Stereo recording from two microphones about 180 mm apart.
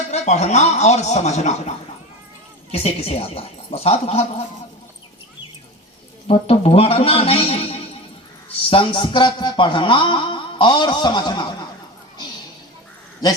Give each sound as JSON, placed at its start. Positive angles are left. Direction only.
{"t": 0.1, "sound": "speech", "side_deg": 40}
{"t": 2.7, "sound": "speech", "side_deg": 35}
{"t": 6.2, "sound": "speech", "side_deg": 35}
{"t": 8.7, "sound": "a sound", "side_deg": 25}